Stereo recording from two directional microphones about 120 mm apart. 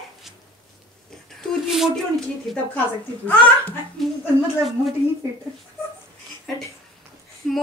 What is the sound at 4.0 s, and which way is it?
Speech, centre (ahead or behind).